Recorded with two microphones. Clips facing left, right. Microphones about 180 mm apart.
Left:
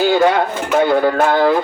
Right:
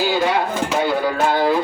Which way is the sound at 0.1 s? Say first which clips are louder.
Left 5 dB; 50° left (ahead or behind).